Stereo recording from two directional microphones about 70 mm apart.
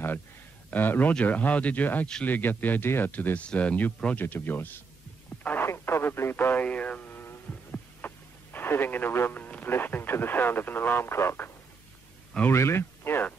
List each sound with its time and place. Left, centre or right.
0.7 s speech: left
5.4 s radio: left
9.7 s speech: left
12.5 s speech: left